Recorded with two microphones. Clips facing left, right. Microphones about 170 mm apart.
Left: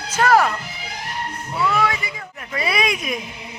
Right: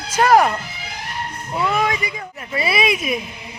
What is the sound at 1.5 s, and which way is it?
Speech, 20° right (ahead or behind).